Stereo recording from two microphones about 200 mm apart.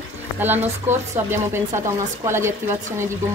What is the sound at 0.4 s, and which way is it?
Speech, 10° right (ahead or behind).